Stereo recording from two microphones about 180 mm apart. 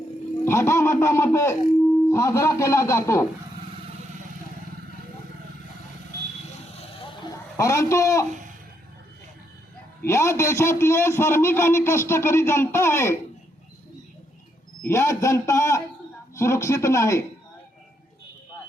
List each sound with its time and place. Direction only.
0.4 s a man's voice: 15° left (ahead or behind)
7.5 s a man's voice: 15° left (ahead or behind)
10.1 s a man's voice: 15° left (ahead or behind)
14.8 s a man's voice: 15° left (ahead or behind)